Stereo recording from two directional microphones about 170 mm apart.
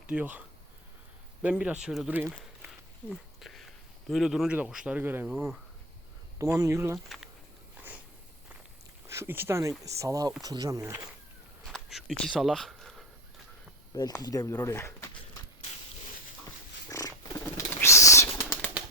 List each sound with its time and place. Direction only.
0.1 s a man's voice: 10° right (ahead or behind)
3.1 s a sound: centre (ahead or behind)
4.1 s a man's voice: centre (ahead or behind)
6.4 s a man's voice: 15° right (ahead or behind)
9.0 s a man's voice: 15° right (ahead or behind)
11.6 s a sound: centre (ahead or behind)
13.9 s speech: 20° left (ahead or behind)
16.9 s bird flight: 20° left (ahead or behind)